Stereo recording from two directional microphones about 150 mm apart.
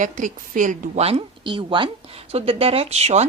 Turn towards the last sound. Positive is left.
turn(degrees=-45)  # may be behind; listen again after turning